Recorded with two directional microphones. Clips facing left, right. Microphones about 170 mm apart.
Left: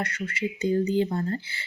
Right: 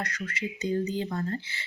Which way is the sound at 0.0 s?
30° left (ahead or behind).